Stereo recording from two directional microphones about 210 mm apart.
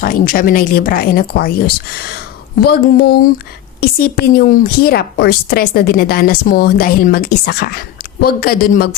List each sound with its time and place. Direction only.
0.0 s a woman's voice: 40° left (ahead or behind)